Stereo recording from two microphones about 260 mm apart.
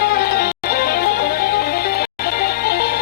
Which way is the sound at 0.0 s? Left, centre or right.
Left.